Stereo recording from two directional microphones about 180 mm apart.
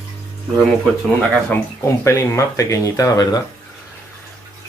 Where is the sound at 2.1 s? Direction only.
15° left (ahead or behind).